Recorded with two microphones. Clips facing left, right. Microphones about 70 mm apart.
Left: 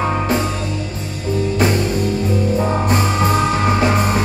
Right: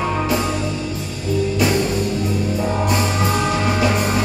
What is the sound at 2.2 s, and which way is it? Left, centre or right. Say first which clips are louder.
Music: left 3 dB; left.